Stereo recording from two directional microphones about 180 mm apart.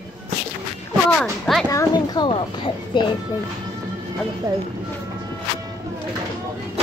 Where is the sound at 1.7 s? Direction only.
20° left (ahead or behind).